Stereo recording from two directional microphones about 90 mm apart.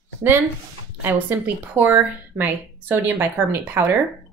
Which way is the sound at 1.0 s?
20° right (ahead or behind).